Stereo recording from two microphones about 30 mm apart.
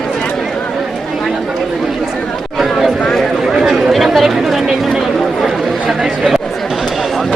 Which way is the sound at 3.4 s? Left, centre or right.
Centre.